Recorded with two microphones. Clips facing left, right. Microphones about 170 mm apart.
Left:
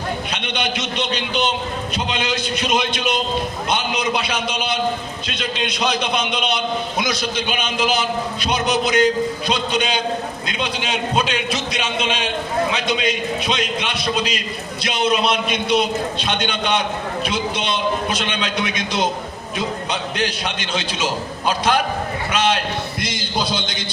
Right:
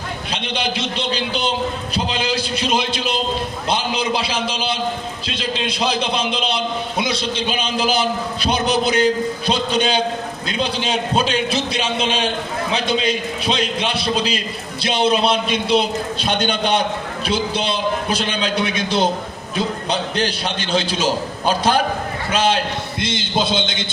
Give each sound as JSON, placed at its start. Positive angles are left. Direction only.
{"t": 0.3, "sound": "a man's voice", "side_deg": -30}